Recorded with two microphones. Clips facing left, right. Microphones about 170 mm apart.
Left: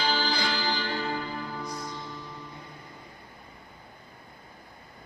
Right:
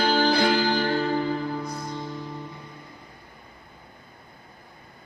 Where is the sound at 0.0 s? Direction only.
55° right (ahead or behind).